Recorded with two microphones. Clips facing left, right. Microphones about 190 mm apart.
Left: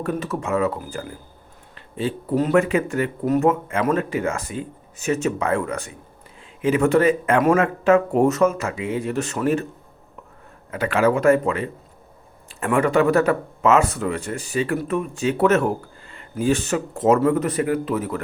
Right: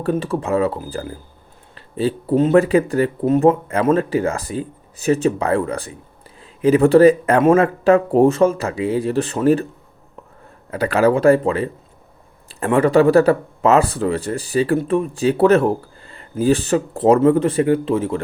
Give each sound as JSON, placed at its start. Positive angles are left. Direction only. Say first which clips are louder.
{"t": 0.0, "sound": "speech", "louder": "right 5 dB", "side_deg": -30}
{"t": 10.7, "sound": "speech", "louder": "right 3 dB", "side_deg": -35}